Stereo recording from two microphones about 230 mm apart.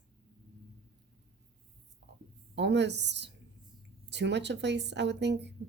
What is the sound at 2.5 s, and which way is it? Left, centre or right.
Speech, right.